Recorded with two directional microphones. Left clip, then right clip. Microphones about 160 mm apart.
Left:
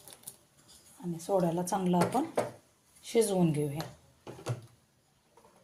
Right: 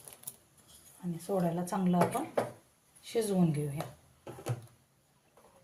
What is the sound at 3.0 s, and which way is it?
Speech, 50° left (ahead or behind).